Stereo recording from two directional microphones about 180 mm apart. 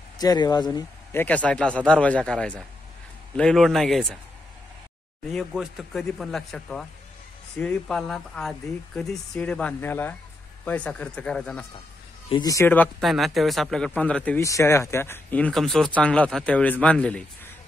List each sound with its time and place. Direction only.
0.2 s speech: 20° left (ahead or behind)
1.2 s speech: 5° left (ahead or behind)
5.3 s speech: centre (ahead or behind)
12.3 s speech: 20° left (ahead or behind); by 17.2 s 5° left (ahead or behind)